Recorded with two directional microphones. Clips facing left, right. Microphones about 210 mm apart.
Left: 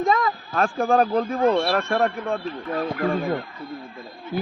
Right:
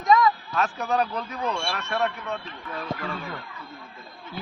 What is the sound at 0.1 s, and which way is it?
Speech, 50° left (ahead or behind).